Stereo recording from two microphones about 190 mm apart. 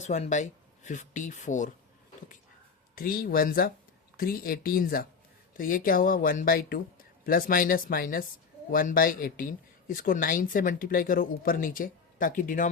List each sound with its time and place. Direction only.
0.0 s speech: 40° left (ahead or behind)
2.9 s speech: 50° left (ahead or behind)